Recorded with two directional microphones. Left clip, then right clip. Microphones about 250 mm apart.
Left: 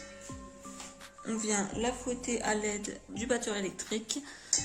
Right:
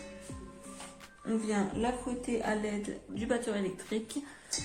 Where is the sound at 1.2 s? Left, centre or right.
Left.